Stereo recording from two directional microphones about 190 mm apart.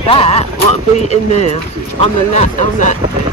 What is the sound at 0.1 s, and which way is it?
Speech, 30° left (ahead or behind).